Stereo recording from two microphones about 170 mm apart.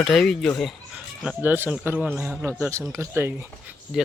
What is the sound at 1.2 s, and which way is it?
Speech, 10° right (ahead or behind).